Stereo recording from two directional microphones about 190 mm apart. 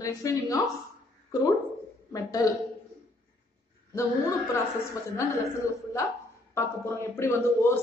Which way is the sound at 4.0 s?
15° left (ahead or behind).